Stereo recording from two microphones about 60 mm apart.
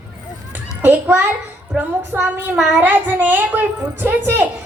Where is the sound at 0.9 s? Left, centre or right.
Right.